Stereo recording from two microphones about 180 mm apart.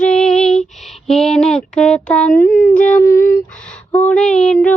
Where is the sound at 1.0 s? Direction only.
5° left (ahead or behind).